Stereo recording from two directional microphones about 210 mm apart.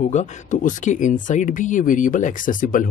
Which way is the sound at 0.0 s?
35° left (ahead or behind).